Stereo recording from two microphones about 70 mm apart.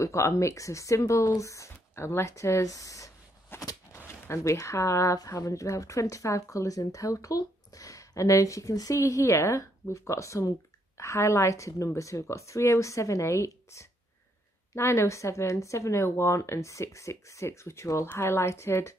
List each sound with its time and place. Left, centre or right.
0.0 s speech: left
3.5 s a sound: left
4.4 s speech: left
18.0 s a woman's voice: left